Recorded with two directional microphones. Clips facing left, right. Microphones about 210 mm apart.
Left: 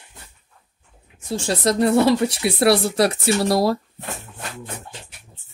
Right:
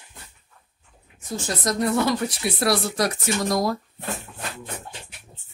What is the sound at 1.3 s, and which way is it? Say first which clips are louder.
Speech: left 6 dB; 30° left (ahead or behind).